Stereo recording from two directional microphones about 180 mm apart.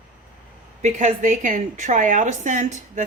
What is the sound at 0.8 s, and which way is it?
A woman's voice, 40° right (ahead or behind).